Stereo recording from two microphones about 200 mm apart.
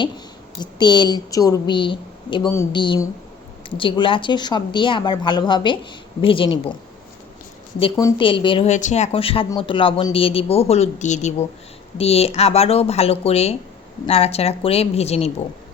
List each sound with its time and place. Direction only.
0.6 s speech: 20° left (ahead or behind)
8.0 s speech: 25° left (ahead or behind)